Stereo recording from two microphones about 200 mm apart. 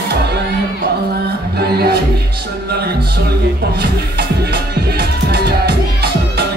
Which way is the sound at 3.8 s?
55° right (ahead or behind).